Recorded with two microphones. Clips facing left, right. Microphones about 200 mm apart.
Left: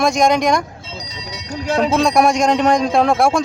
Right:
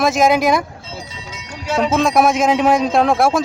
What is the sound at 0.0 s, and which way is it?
Speech, 5° right (ahead or behind).